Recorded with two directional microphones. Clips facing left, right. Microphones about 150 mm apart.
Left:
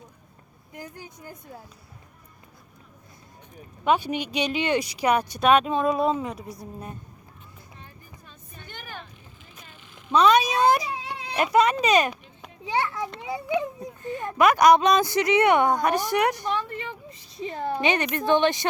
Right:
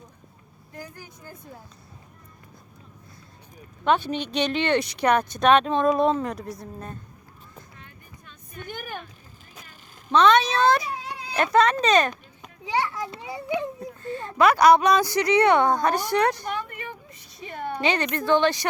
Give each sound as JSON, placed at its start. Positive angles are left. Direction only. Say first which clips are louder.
{"t": 0.7, "sound": "speech", "louder": "left 1 dB", "side_deg": 20}
{"t": 3.8, "sound": "speech", "louder": "even", "side_deg": 10}
{"t": 8.6, "sound": "vehicle", "louder": "right 6 dB", "side_deg": -10}
{"t": 10.1, "sound": "speech", "louder": "right 1 dB", "side_deg": 10}
{"t": 11.3, "sound": "speech", "louder": "right 1 dB", "side_deg": 10}
{"t": 13.1, "sound": "speech", "louder": "left 2 dB", "side_deg": 20}
{"t": 16.6, "sound": "a sound", "louder": "left 2 dB", "side_deg": 30}
{"t": 17.7, "sound": "speech", "louder": "right 1 dB", "side_deg": 20}